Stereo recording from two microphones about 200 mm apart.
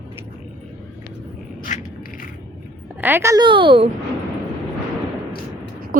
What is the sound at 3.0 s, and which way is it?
Speech, 10° right (ahead or behind).